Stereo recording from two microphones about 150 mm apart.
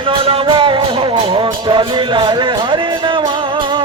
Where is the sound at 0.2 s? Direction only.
40° right (ahead or behind).